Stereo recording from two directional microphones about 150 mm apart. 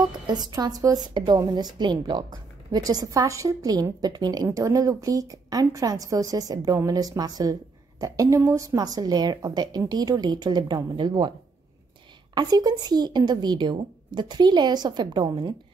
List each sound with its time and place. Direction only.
0.3 s a woman's voice: 25° right (ahead or behind)
12.4 s a woman's voice: 25° right (ahead or behind)